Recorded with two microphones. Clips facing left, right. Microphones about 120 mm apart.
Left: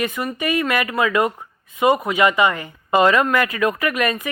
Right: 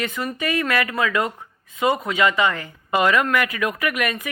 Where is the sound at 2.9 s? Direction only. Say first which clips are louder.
Left 3 dB; 30° left (ahead or behind).